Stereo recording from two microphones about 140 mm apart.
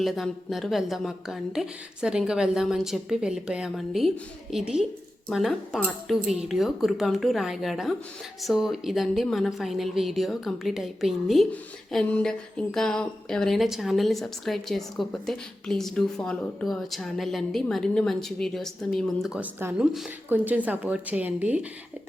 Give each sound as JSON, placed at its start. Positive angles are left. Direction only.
{"t": 0.0, "sound": "a woman's voice", "side_deg": 0}
{"t": 19.5, "sound": "a woman's voice", "side_deg": -15}